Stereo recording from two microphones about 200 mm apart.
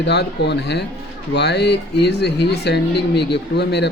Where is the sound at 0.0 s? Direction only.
55° left (ahead or behind).